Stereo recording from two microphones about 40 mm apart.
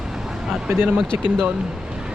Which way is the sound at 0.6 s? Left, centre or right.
Right.